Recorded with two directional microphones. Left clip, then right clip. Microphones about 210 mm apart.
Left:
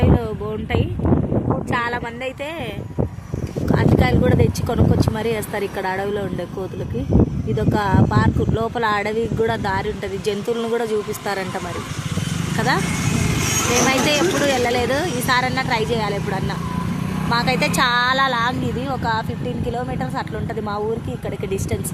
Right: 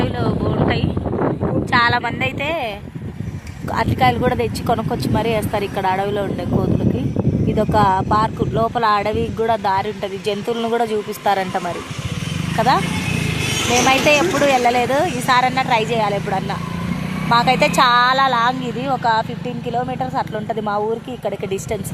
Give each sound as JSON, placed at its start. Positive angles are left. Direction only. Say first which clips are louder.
{"t": 1.7, "sound": "speech", "louder": "right 10 dB", "side_deg": 0}
{"t": 3.8, "sound": "speech", "louder": "right 3 dB", "side_deg": -10}
{"t": 7.5, "sound": "speech", "louder": "right 6 dB", "side_deg": -5}
{"t": 13.2, "sound": "vehicle", "louder": "even", "side_deg": 55}
{"t": 14.1, "sound": "speech", "louder": "right 4 dB", "side_deg": -5}
{"t": 21.2, "sound": "speech", "louder": "right 4 dB", "side_deg": -5}